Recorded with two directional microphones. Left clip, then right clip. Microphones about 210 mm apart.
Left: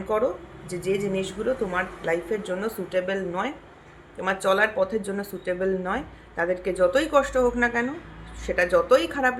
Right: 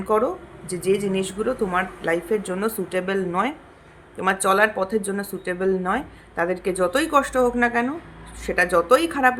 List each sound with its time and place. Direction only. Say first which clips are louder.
0.1 s a woman's voice: right 3 dB; 35° right (ahead or behind)